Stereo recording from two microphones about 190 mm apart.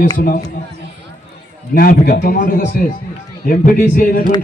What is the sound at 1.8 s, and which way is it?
A man's voice, 50° left (ahead or behind).